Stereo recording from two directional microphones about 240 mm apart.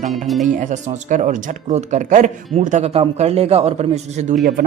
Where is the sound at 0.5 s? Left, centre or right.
Right.